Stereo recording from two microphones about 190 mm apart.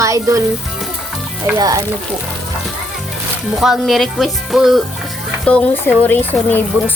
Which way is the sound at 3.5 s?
Centre (ahead or behind).